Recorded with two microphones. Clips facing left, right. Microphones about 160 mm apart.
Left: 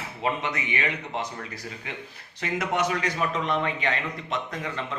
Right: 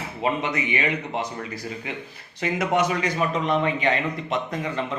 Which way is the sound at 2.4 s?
5° right (ahead or behind).